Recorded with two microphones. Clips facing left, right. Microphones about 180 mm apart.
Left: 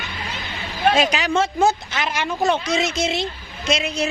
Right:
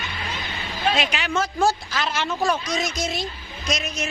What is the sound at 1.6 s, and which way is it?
Speech, 20° left (ahead or behind).